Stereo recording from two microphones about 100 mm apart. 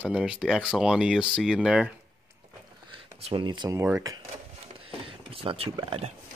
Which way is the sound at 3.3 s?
50° right (ahead or behind).